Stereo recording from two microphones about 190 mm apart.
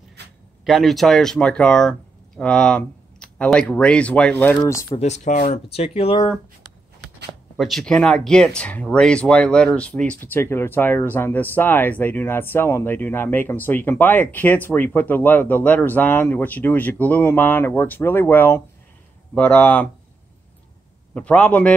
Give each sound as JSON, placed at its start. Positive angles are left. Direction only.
{"t": 0.2, "sound": "a sound", "side_deg": -60}
{"t": 0.7, "sound": "speech", "side_deg": 0}
{"t": 4.9, "sound": "speech", "side_deg": 35}
{"t": 7.5, "sound": "speech", "side_deg": 0}
{"t": 21.1, "sound": "speech", "side_deg": 5}